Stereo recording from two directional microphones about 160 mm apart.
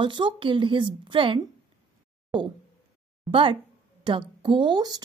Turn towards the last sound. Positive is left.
turn(degrees=-25)  # may be behind; listen again after turning